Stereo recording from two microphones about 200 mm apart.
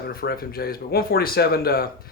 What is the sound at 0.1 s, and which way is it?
Speech, 50° left (ahead or behind).